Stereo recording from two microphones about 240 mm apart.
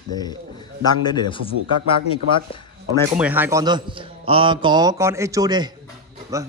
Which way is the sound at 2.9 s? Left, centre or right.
Centre.